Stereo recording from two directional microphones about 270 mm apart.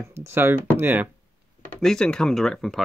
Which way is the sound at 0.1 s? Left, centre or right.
Centre.